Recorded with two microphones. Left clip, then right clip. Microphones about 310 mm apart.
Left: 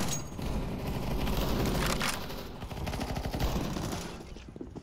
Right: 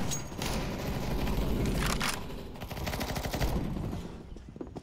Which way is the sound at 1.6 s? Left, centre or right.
Centre.